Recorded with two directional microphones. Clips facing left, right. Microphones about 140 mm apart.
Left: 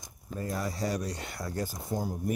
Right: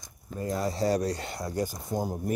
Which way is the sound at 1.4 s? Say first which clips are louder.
Right 4 dB; 15° right (ahead or behind).